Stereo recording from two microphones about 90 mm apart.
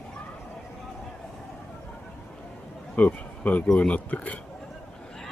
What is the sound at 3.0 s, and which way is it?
Speech, 15° left (ahead or behind).